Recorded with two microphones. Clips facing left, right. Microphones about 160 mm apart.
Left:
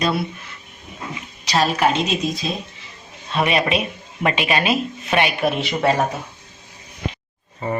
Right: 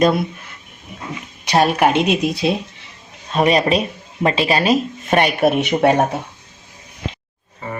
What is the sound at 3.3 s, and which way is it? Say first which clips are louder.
Speech: right 4 dB; 40° right (ahead or behind).